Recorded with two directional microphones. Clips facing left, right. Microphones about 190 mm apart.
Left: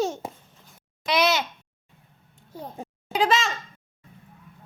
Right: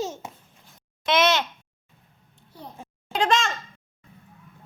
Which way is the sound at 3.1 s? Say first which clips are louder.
Even; centre (ahead or behind).